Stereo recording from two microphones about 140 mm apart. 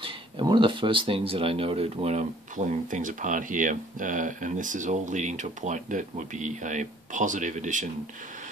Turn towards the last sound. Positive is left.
turn(degrees=-60)  # may be behind; listen again after turning